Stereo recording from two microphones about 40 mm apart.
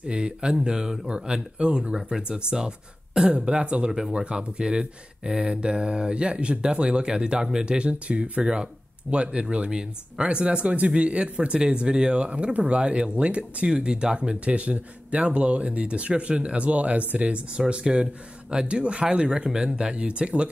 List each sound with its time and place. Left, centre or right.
0.0 s speech: right
9.7 s speech: right
17.6 s speech: right